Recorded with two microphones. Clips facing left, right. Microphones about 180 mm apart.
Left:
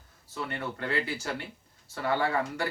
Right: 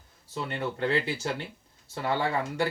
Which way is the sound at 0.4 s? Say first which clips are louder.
Right 4 dB; 25° right (ahead or behind).